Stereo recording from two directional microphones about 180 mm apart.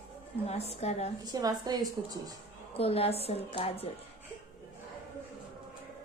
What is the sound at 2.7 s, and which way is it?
A woman's voice, 35° left (ahead or behind).